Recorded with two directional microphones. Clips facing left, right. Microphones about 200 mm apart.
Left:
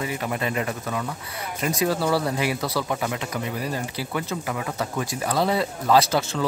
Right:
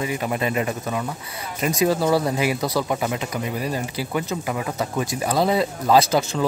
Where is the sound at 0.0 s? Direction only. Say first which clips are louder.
Right 3 dB; 20° right (ahead or behind).